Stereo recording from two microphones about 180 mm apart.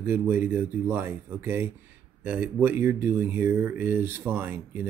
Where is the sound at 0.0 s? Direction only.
10° right (ahead or behind).